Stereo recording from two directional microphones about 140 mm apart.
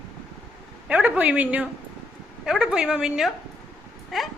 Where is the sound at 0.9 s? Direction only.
10° right (ahead or behind).